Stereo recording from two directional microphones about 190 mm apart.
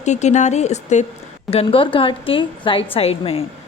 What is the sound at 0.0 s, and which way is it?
A woman's voice, 35° left (ahead or behind).